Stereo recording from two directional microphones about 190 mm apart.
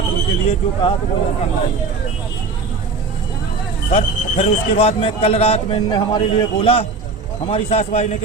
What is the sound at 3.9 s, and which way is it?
Speech, 30° left (ahead or behind).